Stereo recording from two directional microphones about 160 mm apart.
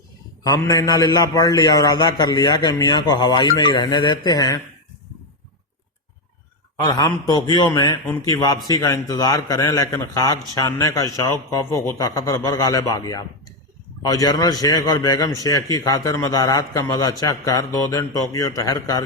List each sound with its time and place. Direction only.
0.4 s a man's voice: 20° left (ahead or behind)
6.8 s a man's voice: 25° left (ahead or behind)